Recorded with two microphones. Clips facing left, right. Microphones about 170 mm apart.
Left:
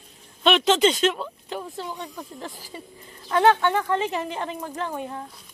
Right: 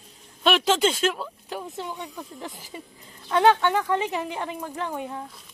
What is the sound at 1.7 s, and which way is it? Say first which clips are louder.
Speech: even; 20° right (ahead or behind).